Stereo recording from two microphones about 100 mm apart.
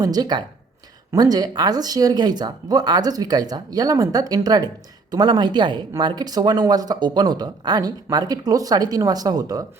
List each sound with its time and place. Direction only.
0.0 s speech: 40° right (ahead or behind)